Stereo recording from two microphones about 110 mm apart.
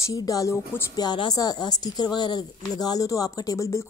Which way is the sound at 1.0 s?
40° left (ahead or behind).